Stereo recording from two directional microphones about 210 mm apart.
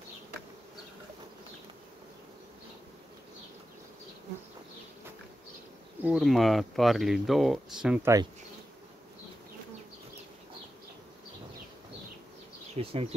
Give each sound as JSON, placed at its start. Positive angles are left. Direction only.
{"t": 6.0, "sound": "speech", "side_deg": 0}
{"t": 12.7, "sound": "bee", "side_deg": -30}